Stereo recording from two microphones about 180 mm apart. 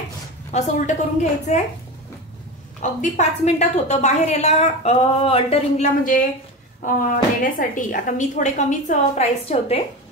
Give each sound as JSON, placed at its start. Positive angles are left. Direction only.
{"t": 0.5, "sound": "a woman's voice", "side_deg": 40}
{"t": 2.8, "sound": "a woman's voice", "side_deg": 40}